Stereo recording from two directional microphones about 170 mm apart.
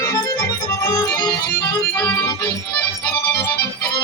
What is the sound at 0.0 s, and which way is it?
Organ, 20° left (ahead or behind).